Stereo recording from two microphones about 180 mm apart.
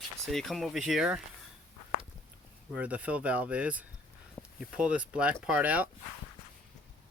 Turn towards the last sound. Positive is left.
turn(degrees=-10)  # may be behind; listen again after turning